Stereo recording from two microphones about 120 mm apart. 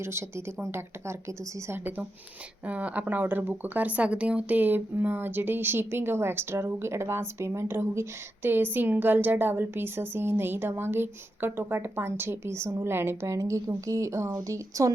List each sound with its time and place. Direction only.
0.0 s speech: 20° right (ahead or behind)